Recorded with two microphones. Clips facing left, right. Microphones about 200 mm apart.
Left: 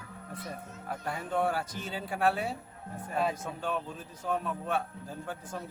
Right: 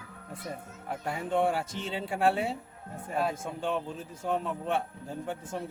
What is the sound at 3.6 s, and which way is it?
A man's voice, 25° right (ahead or behind).